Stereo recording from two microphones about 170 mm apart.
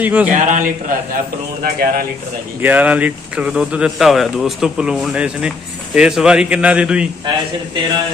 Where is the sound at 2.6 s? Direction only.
10° right (ahead or behind).